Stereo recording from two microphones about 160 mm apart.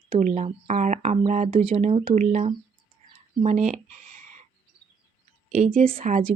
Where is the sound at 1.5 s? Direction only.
35° right (ahead or behind).